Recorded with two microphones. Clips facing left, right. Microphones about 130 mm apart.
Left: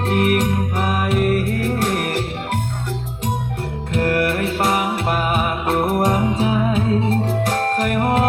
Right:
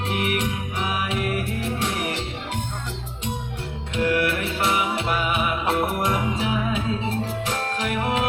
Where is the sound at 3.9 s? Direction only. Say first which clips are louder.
Left 3 dB; 45° left (ahead or behind).